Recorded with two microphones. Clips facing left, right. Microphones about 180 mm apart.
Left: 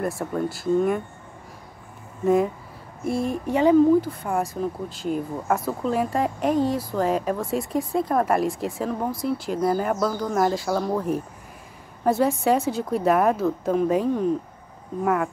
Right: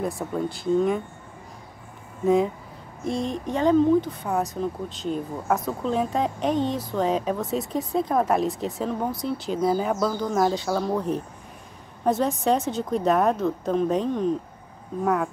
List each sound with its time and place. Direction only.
0.0 s speech: centre (ahead or behind)
2.2 s speech: centre (ahead or behind)